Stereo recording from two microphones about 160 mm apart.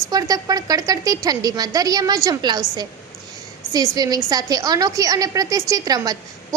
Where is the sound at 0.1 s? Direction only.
25° right (ahead or behind).